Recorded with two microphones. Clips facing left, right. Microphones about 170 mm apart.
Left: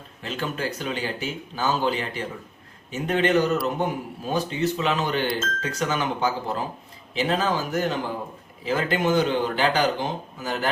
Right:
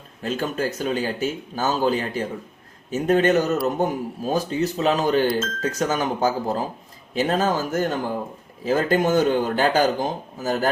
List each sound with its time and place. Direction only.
0.2 s a man's voice: 45° right (ahead or behind)